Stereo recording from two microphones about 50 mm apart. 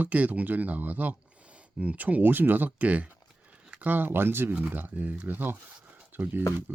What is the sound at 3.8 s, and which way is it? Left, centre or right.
Speech, right.